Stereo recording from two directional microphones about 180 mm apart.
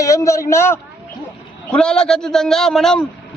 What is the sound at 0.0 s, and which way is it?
Speech, 15° left (ahead or behind).